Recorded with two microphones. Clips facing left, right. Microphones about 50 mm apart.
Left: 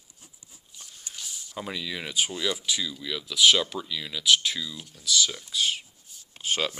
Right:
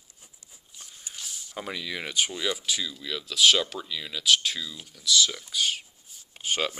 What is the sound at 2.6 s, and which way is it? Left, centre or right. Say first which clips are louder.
Speech: left 1 dB; centre.